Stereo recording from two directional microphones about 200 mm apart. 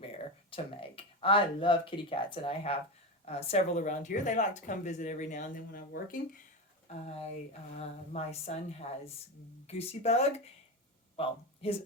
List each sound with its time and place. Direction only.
0.5 s speech: 25° left (ahead or behind)